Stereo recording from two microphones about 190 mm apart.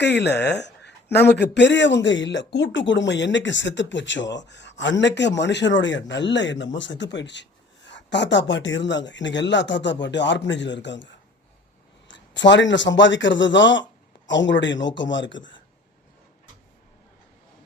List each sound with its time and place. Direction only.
0.0 s speech: 65° left (ahead or behind)